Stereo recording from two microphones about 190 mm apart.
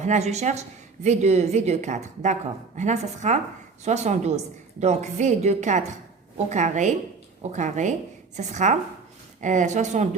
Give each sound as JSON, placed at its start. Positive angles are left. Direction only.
{"t": 0.0, "sound": "a woman's voice", "side_deg": -35}